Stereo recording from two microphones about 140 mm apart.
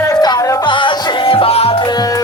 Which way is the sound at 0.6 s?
35° left (ahead or behind).